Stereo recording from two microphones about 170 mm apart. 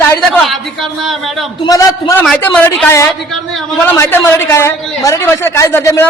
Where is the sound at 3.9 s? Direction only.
15° left (ahead or behind).